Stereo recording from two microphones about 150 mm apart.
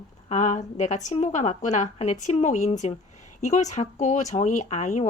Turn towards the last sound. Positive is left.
turn(degrees=55)  # may be behind; listen again after turning